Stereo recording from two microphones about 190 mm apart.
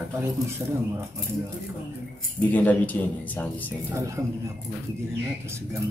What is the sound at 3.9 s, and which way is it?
Speech, 15° right (ahead or behind).